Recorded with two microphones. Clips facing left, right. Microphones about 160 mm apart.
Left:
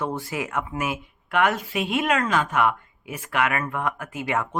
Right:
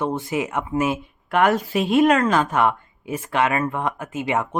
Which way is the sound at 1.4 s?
40° right (ahead or behind).